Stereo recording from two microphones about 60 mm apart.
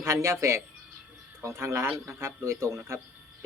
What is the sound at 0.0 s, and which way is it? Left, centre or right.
Speech, right.